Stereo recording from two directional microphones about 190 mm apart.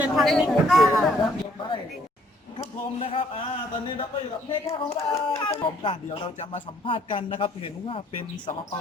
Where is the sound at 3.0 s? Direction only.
30° left (ahead or behind).